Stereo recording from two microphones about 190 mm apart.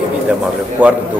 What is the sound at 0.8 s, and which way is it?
Speech, 10° right (ahead or behind).